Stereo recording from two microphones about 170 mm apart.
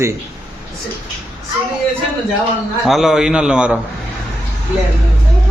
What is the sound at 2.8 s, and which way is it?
Speech, centre (ahead or behind).